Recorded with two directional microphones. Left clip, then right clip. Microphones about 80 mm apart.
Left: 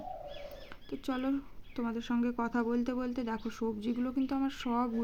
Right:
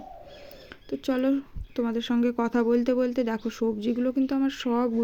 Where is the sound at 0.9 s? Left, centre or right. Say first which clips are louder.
Right 9 dB; right.